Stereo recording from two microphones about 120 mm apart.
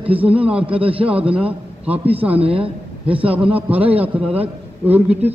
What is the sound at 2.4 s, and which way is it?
Speech, 50° right (ahead or behind).